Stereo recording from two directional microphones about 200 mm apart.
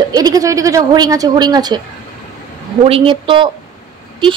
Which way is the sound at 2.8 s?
25° right (ahead or behind).